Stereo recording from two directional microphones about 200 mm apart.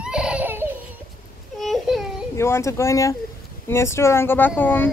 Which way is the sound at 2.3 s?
15° left (ahead or behind).